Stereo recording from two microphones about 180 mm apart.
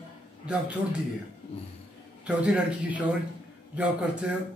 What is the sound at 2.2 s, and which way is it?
Speech, 5° right (ahead or behind).